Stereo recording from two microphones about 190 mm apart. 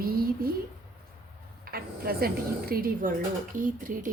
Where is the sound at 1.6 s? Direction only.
55° right (ahead or behind).